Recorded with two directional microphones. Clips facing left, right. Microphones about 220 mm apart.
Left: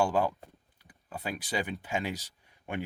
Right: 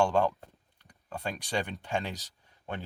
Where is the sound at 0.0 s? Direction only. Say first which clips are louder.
Right 1 dB; 5° left (ahead or behind).